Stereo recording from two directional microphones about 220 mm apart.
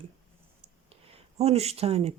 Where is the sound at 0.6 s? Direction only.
25° right (ahead or behind).